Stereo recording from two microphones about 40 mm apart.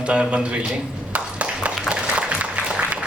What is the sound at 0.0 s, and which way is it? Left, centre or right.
Speech, right.